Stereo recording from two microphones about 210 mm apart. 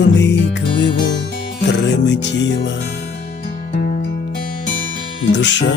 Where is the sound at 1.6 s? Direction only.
55° left (ahead or behind).